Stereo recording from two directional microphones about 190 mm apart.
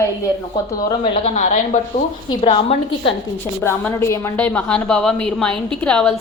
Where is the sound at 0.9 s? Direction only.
25° left (ahead or behind).